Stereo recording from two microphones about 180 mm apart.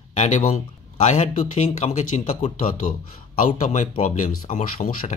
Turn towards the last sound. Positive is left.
turn(degrees=45)  # may be behind; listen again after turning